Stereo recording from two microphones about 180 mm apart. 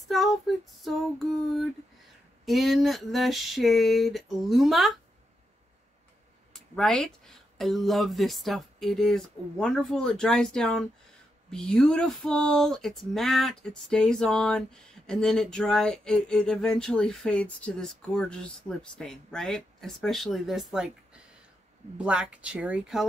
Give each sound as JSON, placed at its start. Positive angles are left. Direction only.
{"t": 0.1, "sound": "speech", "side_deg": 0}
{"t": 2.4, "sound": "speech", "side_deg": 0}
{"t": 6.5, "sound": "speech", "side_deg": 5}